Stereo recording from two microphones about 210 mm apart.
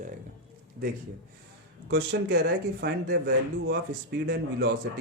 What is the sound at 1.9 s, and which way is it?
A man's voice, 55° right (ahead or behind).